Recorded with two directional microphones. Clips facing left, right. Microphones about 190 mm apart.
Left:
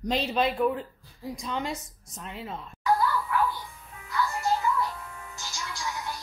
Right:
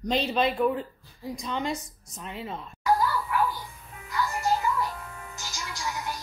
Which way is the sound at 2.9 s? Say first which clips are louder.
Even; 10° right (ahead or behind).